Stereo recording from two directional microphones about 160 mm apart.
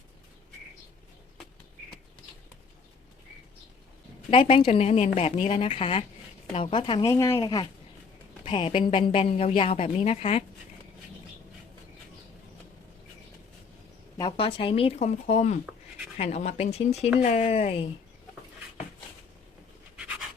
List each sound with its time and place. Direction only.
4.3 s a woman's voice: 40° left (ahead or behind)
7.1 s speech: 20° left (ahead or behind)
8.4 s a woman's voice: 35° left (ahead or behind)
14.2 s a woman's voice: 35° left (ahead or behind)